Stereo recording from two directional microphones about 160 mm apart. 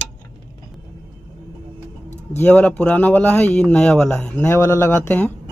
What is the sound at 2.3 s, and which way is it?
Speech, 10° left (ahead or behind).